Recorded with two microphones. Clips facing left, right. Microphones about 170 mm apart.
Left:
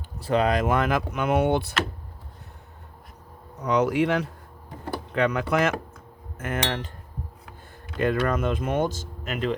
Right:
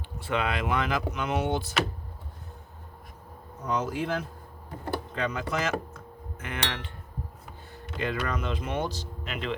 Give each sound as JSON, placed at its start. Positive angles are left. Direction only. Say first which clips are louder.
{"t": 0.2, "sound": "speech", "louder": "left 7 dB", "side_deg": 40}
{"t": 3.6, "sound": "speech", "louder": "left 8 dB", "side_deg": 70}
{"t": 5.1, "sound": "speech", "louder": "left 10 dB", "side_deg": 65}
{"t": 6.3, "sound": "speech", "louder": "left 6 dB", "side_deg": 45}
{"t": 7.9, "sound": "speech", "louder": "left 7 dB", "side_deg": 50}